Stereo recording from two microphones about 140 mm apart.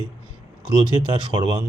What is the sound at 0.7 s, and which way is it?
Speech, 30° right (ahead or behind).